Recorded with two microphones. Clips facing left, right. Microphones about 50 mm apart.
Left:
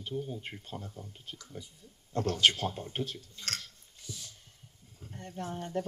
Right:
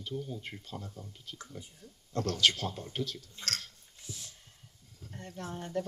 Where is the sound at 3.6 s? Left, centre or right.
Right.